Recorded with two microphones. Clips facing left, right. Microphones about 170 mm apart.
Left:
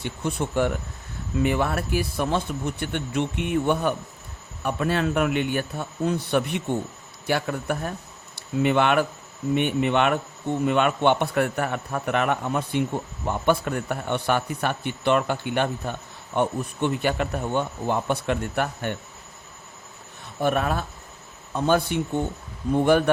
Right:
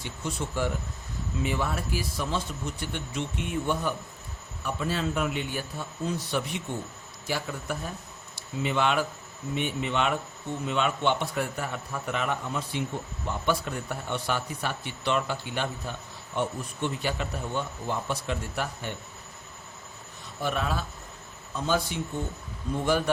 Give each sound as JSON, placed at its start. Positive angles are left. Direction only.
{"t": 0.0, "sound": "a man's voice", "side_deg": 55}
{"t": 20.4, "sound": "a man's voice", "side_deg": 55}